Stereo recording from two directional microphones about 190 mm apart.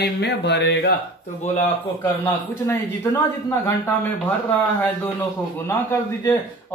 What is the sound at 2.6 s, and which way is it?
Speech, 15° left (ahead or behind).